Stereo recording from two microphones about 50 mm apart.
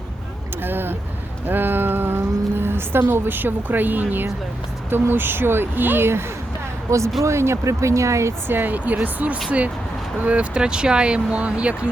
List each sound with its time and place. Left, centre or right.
0.6 s vehicle: right
1.5 s a woman's voice: right
6.9 s speech: right
7.3 s speech: right
8.4 s speech: right